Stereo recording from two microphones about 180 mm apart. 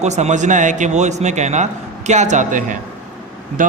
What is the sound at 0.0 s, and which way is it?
A man's voice, 40° right (ahead or behind).